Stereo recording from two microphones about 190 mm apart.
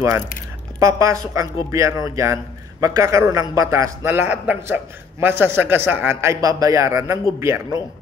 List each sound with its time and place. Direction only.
0.7 s a man's voice: 15° right (ahead or behind)